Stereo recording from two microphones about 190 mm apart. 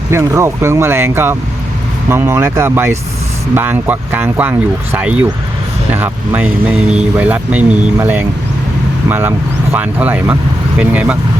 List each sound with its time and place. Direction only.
0.1 s speech: 15° right (ahead or behind)